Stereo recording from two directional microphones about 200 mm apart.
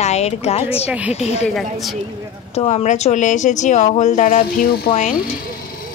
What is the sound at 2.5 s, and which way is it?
A woman's voice, 35° left (ahead or behind).